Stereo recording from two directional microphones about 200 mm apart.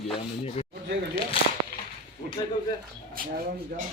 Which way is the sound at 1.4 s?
25° left (ahead or behind).